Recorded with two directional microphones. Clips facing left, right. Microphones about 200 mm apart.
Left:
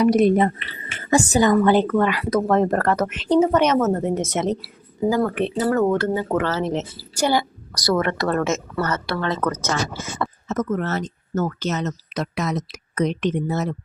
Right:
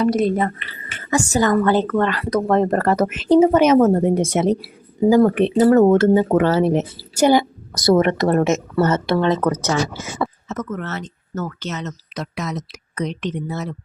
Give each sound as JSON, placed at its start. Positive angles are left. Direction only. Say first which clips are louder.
{"t": 0.0, "sound": "a woman's voice", "louder": "left 2 dB", "side_deg": 15}
{"t": 10.5, "sound": "speech", "louder": "left 4 dB", "side_deg": 40}